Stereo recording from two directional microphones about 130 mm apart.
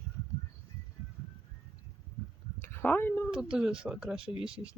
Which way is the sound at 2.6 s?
15° left (ahead or behind).